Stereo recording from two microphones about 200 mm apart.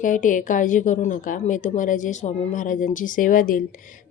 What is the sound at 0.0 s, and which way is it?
Speech, 40° left (ahead or behind).